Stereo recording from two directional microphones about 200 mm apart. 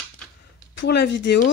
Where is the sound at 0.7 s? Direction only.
60° left (ahead or behind).